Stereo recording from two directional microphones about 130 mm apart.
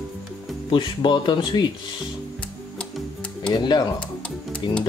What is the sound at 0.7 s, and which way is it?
Speech, 35° left (ahead or behind).